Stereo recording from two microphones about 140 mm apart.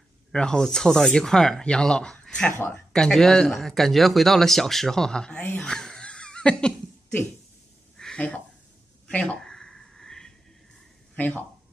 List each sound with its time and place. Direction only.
0.3 s speech: 5° left (ahead or behind)
8.0 s a sound: 5° left (ahead or behind)
11.1 s speech: 10° left (ahead or behind)